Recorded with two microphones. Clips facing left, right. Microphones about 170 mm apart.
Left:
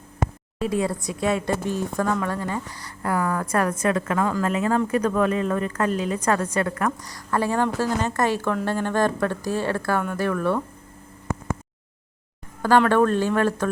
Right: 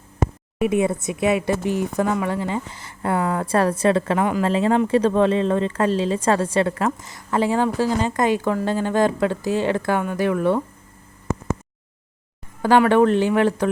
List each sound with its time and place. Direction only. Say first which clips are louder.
0.6 s a woman's voice: right 4 dB; 20° right (ahead or behind)
12.6 s speech: right 3 dB; 15° right (ahead or behind)